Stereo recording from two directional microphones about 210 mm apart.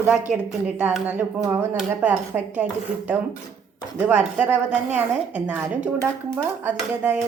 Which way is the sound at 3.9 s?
5° right (ahead or behind).